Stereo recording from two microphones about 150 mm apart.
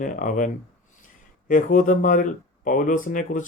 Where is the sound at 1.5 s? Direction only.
65° left (ahead or behind).